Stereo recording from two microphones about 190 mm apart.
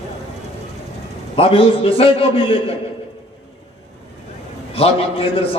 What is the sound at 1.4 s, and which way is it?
A man's voice, 30° left (ahead or behind).